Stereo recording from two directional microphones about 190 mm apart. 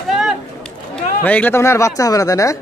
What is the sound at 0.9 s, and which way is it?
Speech, 5° left (ahead or behind).